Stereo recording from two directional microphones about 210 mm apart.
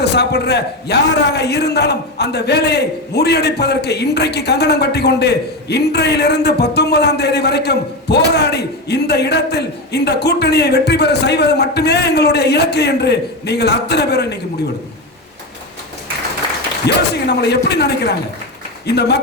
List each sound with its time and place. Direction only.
0.0 s a man's voice: 50° left (ahead or behind)
16.8 s a man's voice: 50° left (ahead or behind)